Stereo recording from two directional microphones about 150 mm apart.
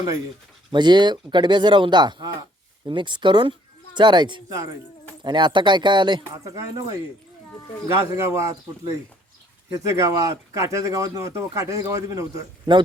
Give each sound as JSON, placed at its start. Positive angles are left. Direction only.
{"t": 0.7, "sound": "speech", "side_deg": -30}